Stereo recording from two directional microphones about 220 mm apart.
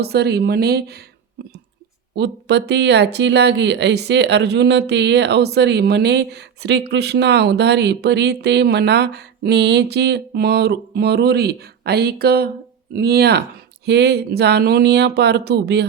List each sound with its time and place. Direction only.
0.0 s speech: 45° right (ahead or behind)
1.4 s a sound: 45° right (ahead or behind)
2.1 s speech: 50° right (ahead or behind)